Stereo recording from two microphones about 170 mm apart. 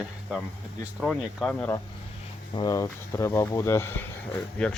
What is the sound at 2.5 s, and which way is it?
Speech, 20° left (ahead or behind).